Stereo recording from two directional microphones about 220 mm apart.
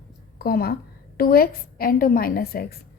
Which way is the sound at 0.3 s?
45° left (ahead or behind).